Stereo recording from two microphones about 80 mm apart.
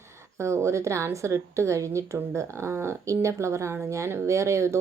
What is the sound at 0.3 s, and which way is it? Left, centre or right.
A woman's voice, right.